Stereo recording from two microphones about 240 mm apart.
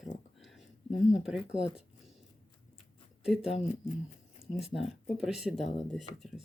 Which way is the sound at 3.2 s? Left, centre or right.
Centre.